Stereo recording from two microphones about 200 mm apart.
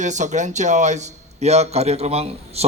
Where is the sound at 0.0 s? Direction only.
35° right (ahead or behind).